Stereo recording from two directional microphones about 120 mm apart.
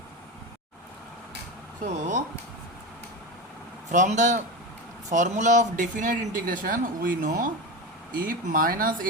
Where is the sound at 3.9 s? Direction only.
90° right.